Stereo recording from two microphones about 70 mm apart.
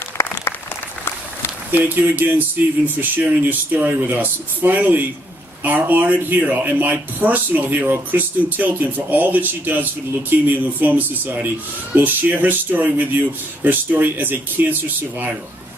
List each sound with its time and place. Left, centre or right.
2.0 s speech: right